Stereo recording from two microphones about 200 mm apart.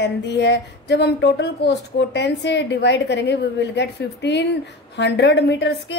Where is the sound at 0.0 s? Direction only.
60° left (ahead or behind).